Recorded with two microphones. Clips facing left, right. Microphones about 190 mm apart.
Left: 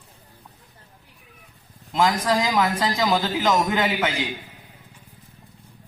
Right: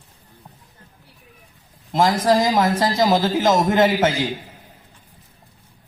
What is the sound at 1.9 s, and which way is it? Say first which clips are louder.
A man's voice: right 4 dB; 40° right (ahead or behind).